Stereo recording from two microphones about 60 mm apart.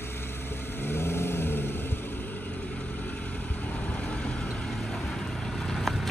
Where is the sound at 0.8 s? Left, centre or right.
Left.